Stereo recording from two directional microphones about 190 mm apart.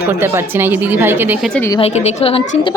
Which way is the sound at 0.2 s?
10° right (ahead or behind).